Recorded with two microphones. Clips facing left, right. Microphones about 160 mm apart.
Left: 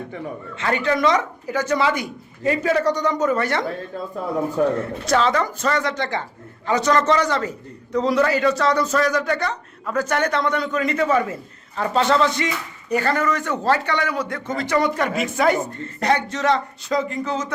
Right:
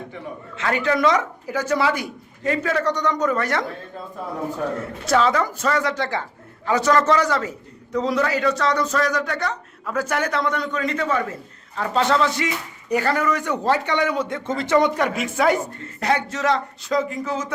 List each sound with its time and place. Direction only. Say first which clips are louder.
0.5 s a man's voice: even; 5° right (ahead or behind)
2.4 s speech: left 3 dB; 10° left (ahead or behind)
4.8 s a man's voice: even; 5° right (ahead or behind); by 11.3 s 10° left (ahead or behind)
11.8 s a man's voice: left 1 dB; centre (ahead or behind)